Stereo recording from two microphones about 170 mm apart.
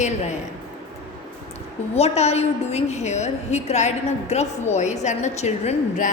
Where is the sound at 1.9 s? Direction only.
40° left (ahead or behind).